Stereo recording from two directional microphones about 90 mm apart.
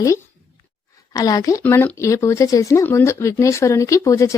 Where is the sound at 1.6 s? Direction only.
20° left (ahead or behind).